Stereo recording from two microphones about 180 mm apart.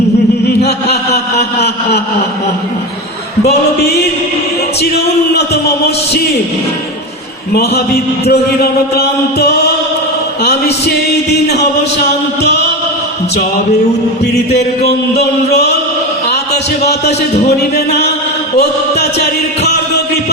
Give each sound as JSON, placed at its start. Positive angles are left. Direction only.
{"t": 0.6, "sound": "a sound", "side_deg": 65}
{"t": 7.5, "sound": "music", "side_deg": 60}
{"t": 14.8, "sound": "music", "side_deg": 65}
{"t": 17.6, "sound": "music", "side_deg": 65}